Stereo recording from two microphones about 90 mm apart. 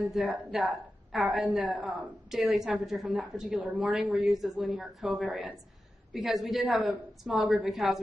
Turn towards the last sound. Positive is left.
turn(degrees=-5)  # may be behind; listen again after turning